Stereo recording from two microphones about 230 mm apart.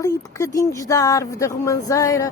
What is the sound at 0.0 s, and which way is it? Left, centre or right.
A woman's voice, centre.